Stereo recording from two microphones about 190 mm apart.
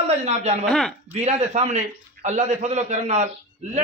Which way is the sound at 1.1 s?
35° right (ahead or behind).